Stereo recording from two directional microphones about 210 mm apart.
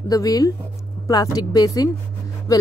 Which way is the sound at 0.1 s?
15° left (ahead or behind).